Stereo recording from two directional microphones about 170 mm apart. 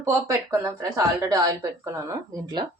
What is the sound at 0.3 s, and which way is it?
Speech, 15° right (ahead or behind).